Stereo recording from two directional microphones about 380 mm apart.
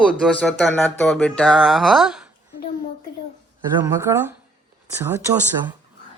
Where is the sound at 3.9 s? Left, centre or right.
Centre.